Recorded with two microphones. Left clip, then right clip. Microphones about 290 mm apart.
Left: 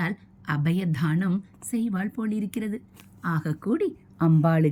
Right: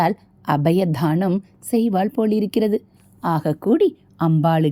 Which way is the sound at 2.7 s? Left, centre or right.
Right.